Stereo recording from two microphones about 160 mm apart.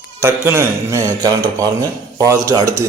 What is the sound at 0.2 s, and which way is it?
A man's voice, 15° right (ahead or behind).